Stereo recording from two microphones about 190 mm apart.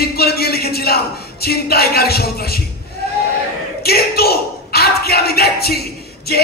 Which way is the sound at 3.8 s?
55° left (ahead or behind).